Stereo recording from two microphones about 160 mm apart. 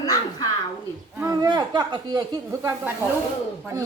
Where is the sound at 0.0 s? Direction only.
25° left (ahead or behind).